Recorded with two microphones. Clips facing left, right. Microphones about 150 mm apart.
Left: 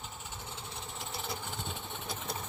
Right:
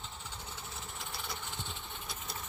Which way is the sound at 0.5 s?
25° left (ahead or behind).